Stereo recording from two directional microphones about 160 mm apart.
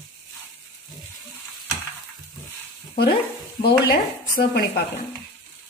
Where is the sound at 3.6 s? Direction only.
90° left.